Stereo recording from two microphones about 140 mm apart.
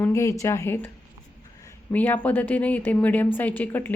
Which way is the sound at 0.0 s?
20° left (ahead or behind).